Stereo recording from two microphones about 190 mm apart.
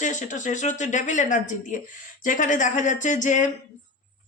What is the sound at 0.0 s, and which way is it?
A woman's voice, 40° left (ahead or behind).